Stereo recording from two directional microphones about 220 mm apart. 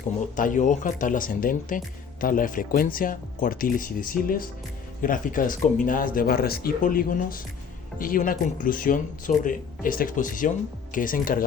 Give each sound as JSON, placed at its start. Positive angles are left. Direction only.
{"t": 0.3, "sound": "speech", "side_deg": 35}